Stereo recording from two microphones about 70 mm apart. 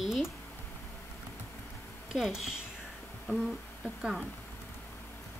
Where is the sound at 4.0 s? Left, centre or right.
Centre.